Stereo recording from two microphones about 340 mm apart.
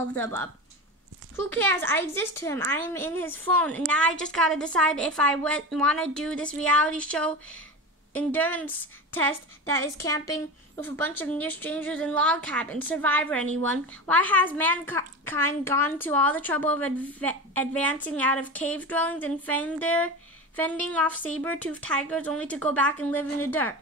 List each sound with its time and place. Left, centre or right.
0.1 s a woman's voice: centre
1.5 s a woman's voice: centre